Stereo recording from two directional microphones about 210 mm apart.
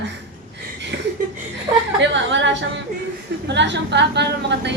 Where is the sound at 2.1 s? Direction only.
60° right (ahead or behind).